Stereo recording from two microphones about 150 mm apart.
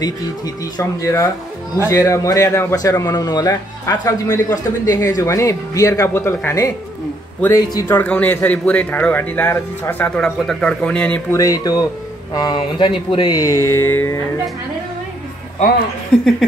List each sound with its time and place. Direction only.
0.7 s a man's voice: 20° left (ahead or behind)
11.3 s a man's voice: 25° left (ahead or behind)